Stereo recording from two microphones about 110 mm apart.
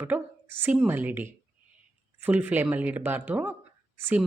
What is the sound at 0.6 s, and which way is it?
Speech, 15° right (ahead or behind).